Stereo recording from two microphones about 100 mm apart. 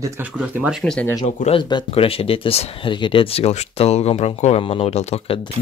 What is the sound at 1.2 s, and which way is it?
Speech, 75° left (ahead or behind).